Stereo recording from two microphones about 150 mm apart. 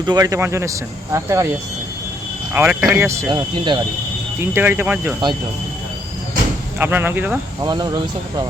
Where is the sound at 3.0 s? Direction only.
20° right (ahead or behind).